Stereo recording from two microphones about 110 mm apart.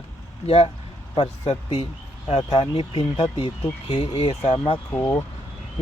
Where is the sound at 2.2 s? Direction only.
65° left (ahead or behind).